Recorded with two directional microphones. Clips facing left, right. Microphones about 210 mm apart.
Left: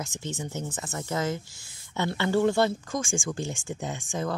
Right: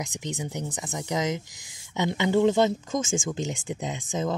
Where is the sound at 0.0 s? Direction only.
15° right (ahead or behind).